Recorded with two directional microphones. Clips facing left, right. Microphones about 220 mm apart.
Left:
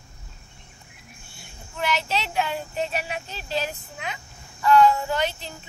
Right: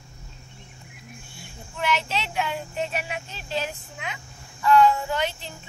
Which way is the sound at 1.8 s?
40° left (ahead or behind).